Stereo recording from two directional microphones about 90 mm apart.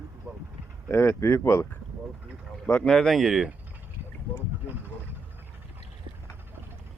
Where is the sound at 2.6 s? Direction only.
10° left (ahead or behind).